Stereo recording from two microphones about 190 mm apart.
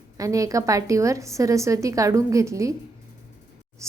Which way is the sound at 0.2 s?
15° right (ahead or behind).